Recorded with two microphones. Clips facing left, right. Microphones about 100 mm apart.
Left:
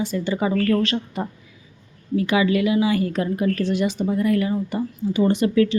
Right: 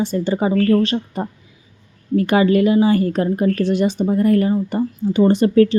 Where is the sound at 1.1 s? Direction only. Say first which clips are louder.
Right 3 dB; 40° right (ahead or behind).